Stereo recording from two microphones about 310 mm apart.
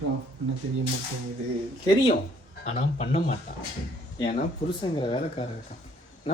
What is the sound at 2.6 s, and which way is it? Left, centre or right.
A man's voice, left.